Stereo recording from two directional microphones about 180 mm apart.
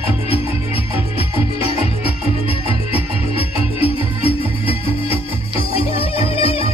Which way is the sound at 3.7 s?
30° left (ahead or behind).